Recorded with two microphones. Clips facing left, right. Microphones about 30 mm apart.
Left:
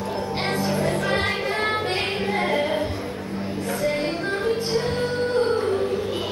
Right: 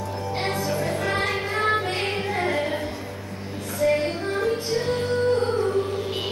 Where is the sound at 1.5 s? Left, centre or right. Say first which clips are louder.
Even; left.